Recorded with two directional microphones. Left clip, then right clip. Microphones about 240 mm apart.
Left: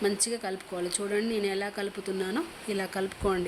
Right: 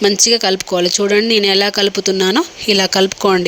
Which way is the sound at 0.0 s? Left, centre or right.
Right.